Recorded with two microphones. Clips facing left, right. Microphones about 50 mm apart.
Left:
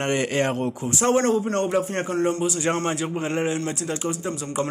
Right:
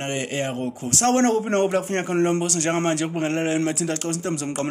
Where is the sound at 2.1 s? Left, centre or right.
Right.